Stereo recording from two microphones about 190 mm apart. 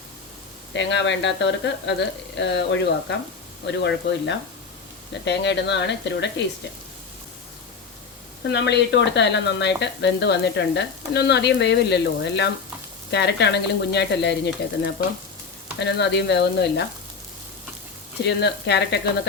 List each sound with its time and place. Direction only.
0.7 s speech: 70° left (ahead or behind)
8.4 s speech: 65° left (ahead or behind)
18.2 s speech: 65° left (ahead or behind)